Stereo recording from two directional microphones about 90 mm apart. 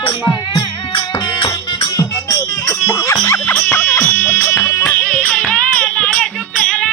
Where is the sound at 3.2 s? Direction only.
25° left (ahead or behind).